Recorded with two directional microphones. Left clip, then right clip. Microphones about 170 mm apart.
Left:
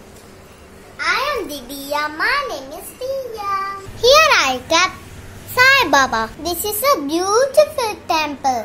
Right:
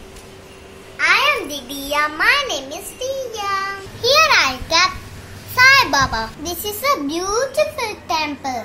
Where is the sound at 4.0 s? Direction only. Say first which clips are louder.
Left 2 dB; 40° left (ahead or behind).